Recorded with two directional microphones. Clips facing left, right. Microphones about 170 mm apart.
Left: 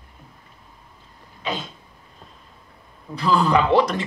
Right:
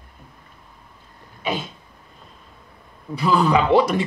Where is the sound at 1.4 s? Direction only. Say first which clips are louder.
Right 3 dB; 10° right (ahead or behind).